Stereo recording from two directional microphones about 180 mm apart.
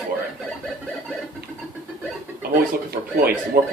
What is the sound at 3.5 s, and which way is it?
Speech, 50° right (ahead or behind).